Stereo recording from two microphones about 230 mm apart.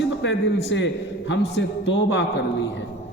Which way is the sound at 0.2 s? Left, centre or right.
Left.